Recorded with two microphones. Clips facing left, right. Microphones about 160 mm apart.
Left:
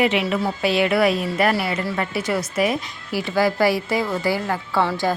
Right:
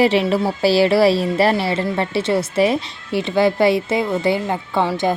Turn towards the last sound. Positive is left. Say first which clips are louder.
# right 2 dB
turn(degrees=-20)  # may be behind; listen again after turning